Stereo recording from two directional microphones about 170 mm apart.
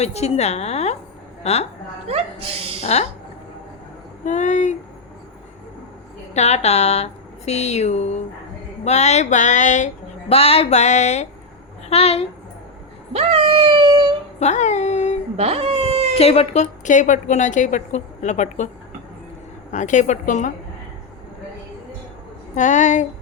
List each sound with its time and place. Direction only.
0.0 s a woman's voice: 40° left (ahead or behind)
2.0 s a woman's voice: 35° right (ahead or behind)
2.8 s a woman's voice: 40° left (ahead or behind)
4.3 s a woman's voice: 45° left (ahead or behind)
6.3 s a woman's voice: 40° left (ahead or behind)
13.1 s dog: 35° right (ahead or behind)
14.3 s speech: 45° left (ahead or behind)
15.4 s baby cry: 35° right (ahead or behind)
16.1 s a woman's voice: 35° left (ahead or behind)
19.7 s a woman's voice: 45° left (ahead or behind)
22.5 s a woman's voice: 45° left (ahead or behind)